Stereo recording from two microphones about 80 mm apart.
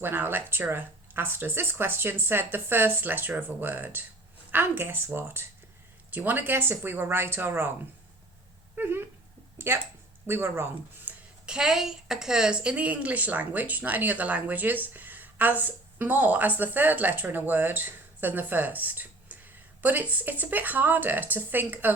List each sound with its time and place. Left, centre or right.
0.0 s a woman's voice: right
8.7 s dog: right
10.2 s speech: right
11.4 s a woman's voice: centre; by 21.9 s right